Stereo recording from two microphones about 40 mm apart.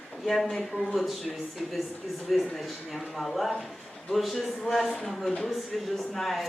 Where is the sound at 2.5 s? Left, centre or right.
Centre.